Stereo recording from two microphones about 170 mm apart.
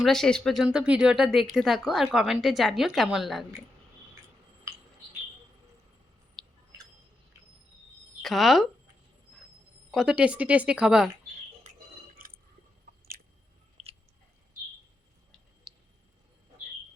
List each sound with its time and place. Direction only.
0.0 s speech: 5° left (ahead or behind)
6.4 s a sound: 5° left (ahead or behind)
8.2 s speech: centre (ahead or behind)
9.9 s speech: 5° right (ahead or behind)
11.6 s a sound: 55° right (ahead or behind)
13.8 s chewing: 40° right (ahead or behind)
15.7 s squish: centre (ahead or behind)